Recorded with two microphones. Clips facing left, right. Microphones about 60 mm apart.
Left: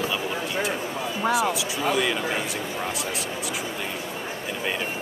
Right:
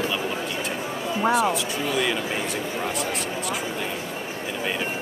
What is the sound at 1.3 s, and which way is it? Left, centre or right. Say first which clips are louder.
Speech: right 2 dB; centre.